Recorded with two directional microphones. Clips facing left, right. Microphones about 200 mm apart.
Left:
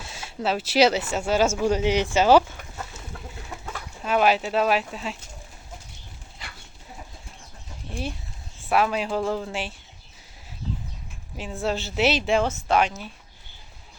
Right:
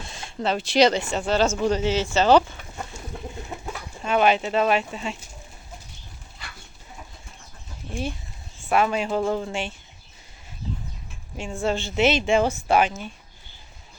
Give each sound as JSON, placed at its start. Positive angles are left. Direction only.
{"t": 0.0, "sound": "speech", "side_deg": 5}
{"t": 3.5, "sound": "chicken", "side_deg": -20}
{"t": 4.0, "sound": "speech", "side_deg": 0}
{"t": 8.6, "sound": "speech", "side_deg": 0}
{"t": 11.3, "sound": "speech", "side_deg": 0}
{"t": 12.5, "sound": "speech", "side_deg": -10}